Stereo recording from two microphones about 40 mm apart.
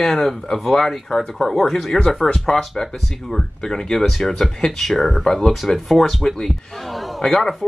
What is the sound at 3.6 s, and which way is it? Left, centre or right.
Speech, centre.